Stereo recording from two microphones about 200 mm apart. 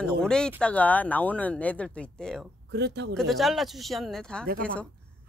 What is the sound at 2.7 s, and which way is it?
Speech, 55° right (ahead or behind).